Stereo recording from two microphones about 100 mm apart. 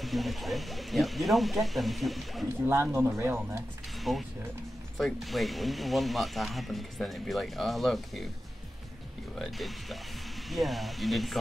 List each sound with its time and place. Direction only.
0.0 s speech: centre (ahead or behind)
2.6 s speech: 25° right (ahead or behind)
4.1 s speech: centre (ahead or behind)
9.4 s speech: centre (ahead or behind)